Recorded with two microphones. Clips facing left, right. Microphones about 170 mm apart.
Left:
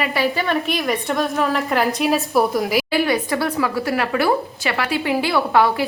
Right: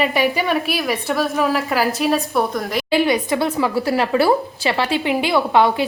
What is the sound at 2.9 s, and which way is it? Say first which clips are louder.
A woman's voice: right 2 dB; 20° right (ahead or behind).